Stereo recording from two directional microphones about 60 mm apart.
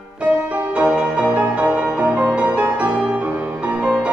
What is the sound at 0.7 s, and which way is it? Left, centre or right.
Music, right.